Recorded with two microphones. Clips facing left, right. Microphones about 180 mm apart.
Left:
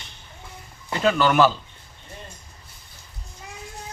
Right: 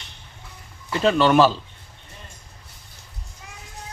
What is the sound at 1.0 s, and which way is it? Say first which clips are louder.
Speech: right 2 dB; 25° right (ahead or behind).